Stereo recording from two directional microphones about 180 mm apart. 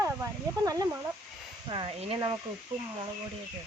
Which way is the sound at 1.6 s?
25° right (ahead or behind).